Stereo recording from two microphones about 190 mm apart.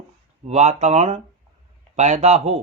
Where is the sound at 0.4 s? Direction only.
35° right (ahead or behind).